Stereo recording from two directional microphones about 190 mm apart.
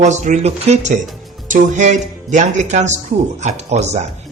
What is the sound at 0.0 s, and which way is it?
Speech, 40° right (ahead or behind).